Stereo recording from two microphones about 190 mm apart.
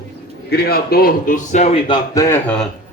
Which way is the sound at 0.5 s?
55° left (ahead or behind).